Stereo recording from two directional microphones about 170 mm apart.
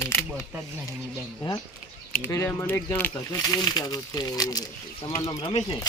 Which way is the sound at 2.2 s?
15° left (ahead or behind).